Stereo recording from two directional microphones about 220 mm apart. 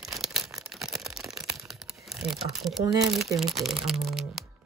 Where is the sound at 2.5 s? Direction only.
Centre (ahead or behind).